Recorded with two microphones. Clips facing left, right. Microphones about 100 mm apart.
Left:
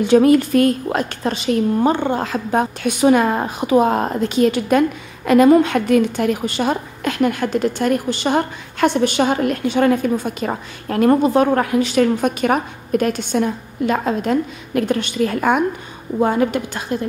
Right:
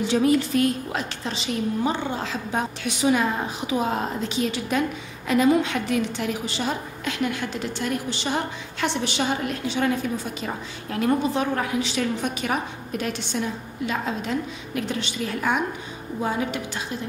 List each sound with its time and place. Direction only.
0.0 s a woman's voice: 55° left (ahead or behind)